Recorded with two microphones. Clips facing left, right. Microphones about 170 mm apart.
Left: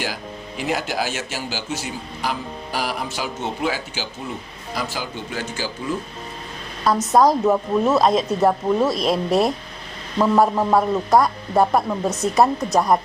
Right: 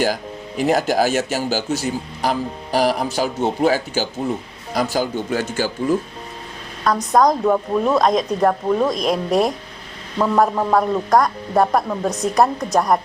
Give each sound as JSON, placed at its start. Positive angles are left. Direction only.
{"t": 0.0, "sound": "speech", "side_deg": -45}
{"t": 6.8, "sound": "speech", "side_deg": 5}